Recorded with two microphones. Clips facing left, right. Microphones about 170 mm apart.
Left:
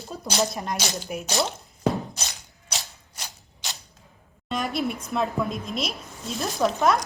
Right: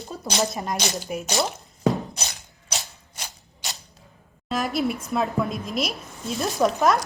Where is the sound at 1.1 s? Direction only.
Centre (ahead or behind).